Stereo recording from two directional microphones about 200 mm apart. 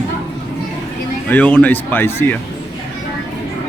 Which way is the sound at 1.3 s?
5° left (ahead or behind).